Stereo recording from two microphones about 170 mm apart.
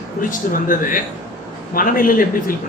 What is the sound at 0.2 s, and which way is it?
A man's voice, 55° left (ahead or behind).